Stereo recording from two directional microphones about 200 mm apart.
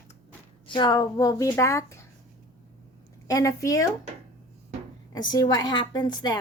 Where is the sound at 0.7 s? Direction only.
20° left (ahead or behind).